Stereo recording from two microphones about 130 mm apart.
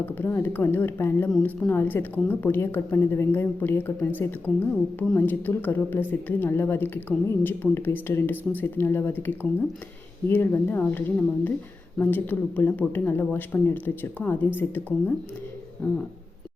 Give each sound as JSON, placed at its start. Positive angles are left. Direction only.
{"t": 0.0, "sound": "a woman's voice", "side_deg": 15}